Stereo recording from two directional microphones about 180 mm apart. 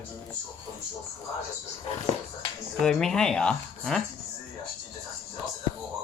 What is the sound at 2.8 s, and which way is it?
Speech, centre (ahead or behind).